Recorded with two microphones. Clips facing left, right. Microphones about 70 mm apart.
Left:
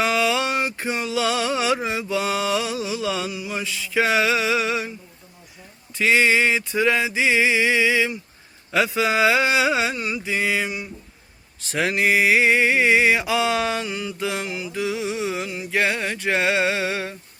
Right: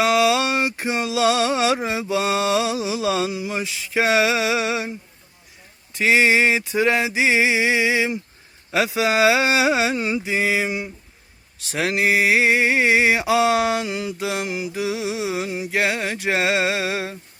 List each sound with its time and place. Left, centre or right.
0.0 s mantra: centre
6.0 s mantra: centre
11.7 s mantra: centre
14.2 s music: centre
15.4 s mantra: centre